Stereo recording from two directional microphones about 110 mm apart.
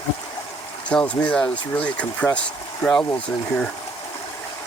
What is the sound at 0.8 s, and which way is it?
Speech, 10° left (ahead or behind).